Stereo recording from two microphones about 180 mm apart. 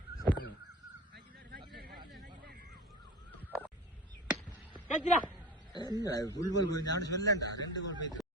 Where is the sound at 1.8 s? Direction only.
60° right (ahead or behind).